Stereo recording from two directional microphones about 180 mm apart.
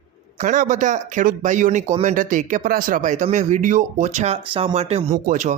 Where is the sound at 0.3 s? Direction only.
45° right (ahead or behind).